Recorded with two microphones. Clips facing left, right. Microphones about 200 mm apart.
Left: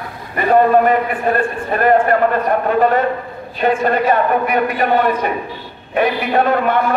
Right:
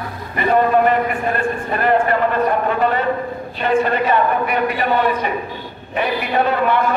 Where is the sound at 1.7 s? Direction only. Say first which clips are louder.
Left 4 dB; 45° left (ahead or behind).